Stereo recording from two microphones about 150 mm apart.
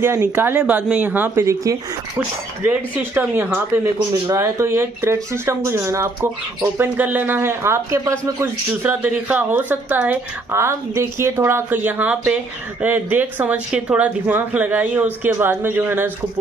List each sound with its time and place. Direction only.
0.0 s speech: 15° right (ahead or behind)